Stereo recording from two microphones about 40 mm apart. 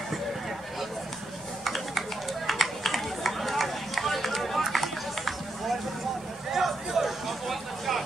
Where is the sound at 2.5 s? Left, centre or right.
Centre.